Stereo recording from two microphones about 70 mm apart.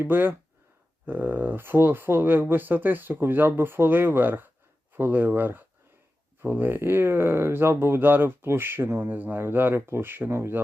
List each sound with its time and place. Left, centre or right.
0.0 s speech: right